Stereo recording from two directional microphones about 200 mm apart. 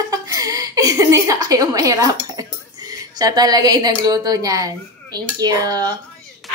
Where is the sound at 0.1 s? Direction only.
15° right (ahead or behind).